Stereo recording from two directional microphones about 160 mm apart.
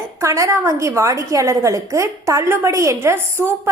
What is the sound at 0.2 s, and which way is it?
A woman's voice, 20° right (ahead or behind).